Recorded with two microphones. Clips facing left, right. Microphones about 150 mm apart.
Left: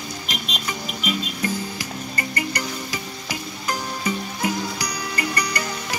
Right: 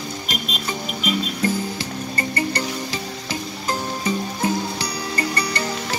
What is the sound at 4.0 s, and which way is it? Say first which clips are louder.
Music: right 2 dB; 30° right (ahead or behind).